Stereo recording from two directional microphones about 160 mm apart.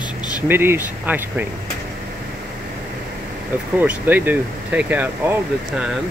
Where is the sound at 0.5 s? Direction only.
15° right (ahead or behind).